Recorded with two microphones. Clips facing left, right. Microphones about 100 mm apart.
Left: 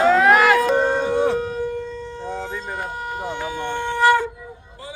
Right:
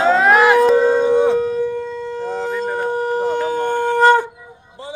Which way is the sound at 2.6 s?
35° right (ahead or behind).